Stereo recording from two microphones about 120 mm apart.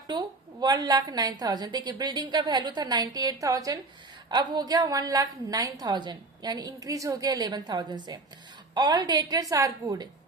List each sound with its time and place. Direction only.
0.1 s a woman's voice: 35° right (ahead or behind)